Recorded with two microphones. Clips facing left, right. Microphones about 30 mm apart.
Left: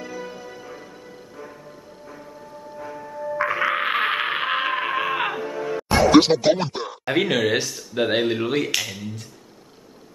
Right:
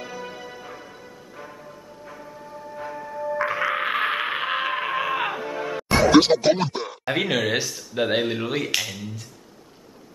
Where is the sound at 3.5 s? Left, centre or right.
Centre.